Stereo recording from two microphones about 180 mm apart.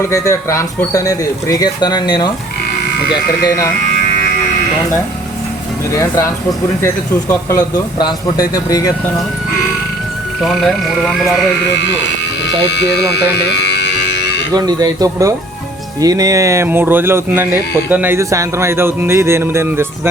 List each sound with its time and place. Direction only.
0.0 s speech: 15° left (ahead or behind)
5.9 s speech: 15° left (ahead or behind)
10.4 s speech: centre (ahead or behind)
12.7 s speech: 70° left (ahead or behind)
13.3 s a sound: 70° left (ahead or behind)
14.5 s speech: 20° right (ahead or behind)